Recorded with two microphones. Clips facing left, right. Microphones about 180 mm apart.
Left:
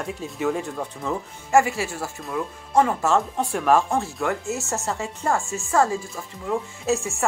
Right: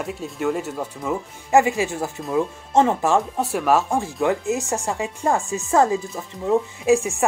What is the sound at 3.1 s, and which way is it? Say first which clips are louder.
Speech: right 2 dB; 5° right (ahead or behind).